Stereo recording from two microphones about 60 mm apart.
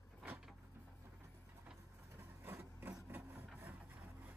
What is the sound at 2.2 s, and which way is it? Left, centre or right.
Vehicle, right.